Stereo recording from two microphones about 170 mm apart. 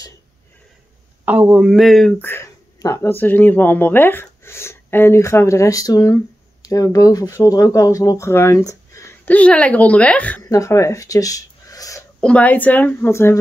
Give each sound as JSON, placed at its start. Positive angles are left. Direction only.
{"t": 1.2, "sound": "speech", "side_deg": -10}
{"t": 10.4, "sound": "speech", "side_deg": 20}
{"t": 12.2, "sound": "speech", "side_deg": 5}